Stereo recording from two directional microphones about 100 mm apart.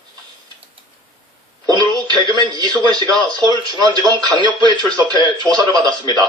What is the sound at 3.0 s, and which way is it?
A man's voice, 45° right (ahead or behind).